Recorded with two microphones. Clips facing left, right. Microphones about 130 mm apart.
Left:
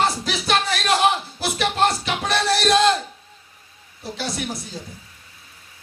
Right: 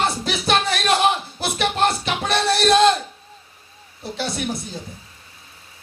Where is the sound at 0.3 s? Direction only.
25° right (ahead or behind).